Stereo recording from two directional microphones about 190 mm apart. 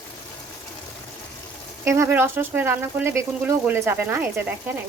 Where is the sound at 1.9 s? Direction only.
15° right (ahead or behind).